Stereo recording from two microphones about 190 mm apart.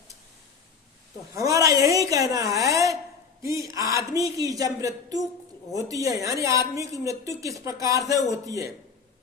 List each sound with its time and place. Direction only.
1.4 s a woman's voice: 15° right (ahead or behind)